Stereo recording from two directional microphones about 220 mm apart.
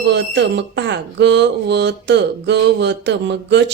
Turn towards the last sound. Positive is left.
turn(degrees=-50)  # may be behind; listen again after turning